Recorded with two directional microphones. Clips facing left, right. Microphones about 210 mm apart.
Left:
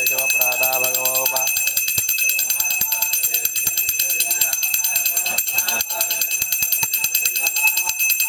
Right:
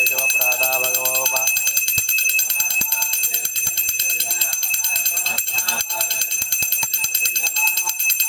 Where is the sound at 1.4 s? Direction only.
50° right (ahead or behind).